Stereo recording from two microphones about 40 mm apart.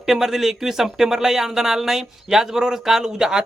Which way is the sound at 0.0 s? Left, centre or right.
Centre.